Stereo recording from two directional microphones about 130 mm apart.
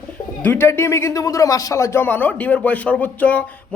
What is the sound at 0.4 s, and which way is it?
Speech, 15° left (ahead or behind).